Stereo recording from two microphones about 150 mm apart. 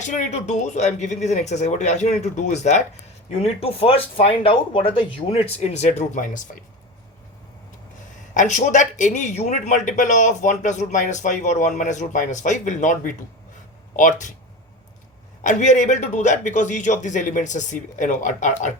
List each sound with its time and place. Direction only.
0.0 s speech: 55° left (ahead or behind)
8.3 s speech: 55° left (ahead or behind)
15.4 s speech: 55° left (ahead or behind)